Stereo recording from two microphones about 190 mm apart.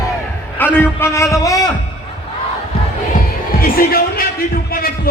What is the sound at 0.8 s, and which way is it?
Speech, 15° left (ahead or behind).